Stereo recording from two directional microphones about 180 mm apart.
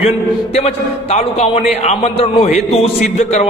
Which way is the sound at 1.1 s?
35° left (ahead or behind).